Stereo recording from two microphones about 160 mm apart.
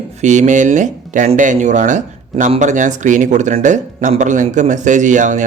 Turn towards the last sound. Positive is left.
turn(degrees=-50)  # may be behind; listen again after turning